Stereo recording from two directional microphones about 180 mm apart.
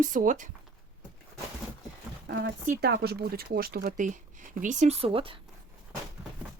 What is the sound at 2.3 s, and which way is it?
Speech, 55° right (ahead or behind).